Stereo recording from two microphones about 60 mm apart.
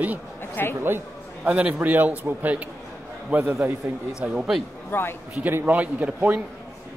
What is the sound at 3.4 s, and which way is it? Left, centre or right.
Speech, right.